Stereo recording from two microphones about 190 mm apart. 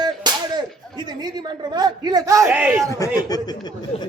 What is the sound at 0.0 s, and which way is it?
Whip, 20° right (ahead or behind).